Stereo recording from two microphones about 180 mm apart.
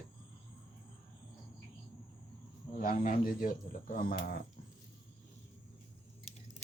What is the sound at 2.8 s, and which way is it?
A man's voice, 50° left (ahead or behind).